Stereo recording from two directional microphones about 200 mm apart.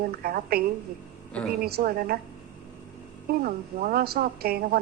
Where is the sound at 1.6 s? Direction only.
50° right (ahead or behind).